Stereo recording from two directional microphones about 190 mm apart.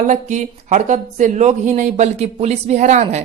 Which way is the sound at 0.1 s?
40° right (ahead or behind).